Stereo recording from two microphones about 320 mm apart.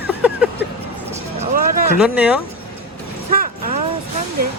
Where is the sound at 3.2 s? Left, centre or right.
Right.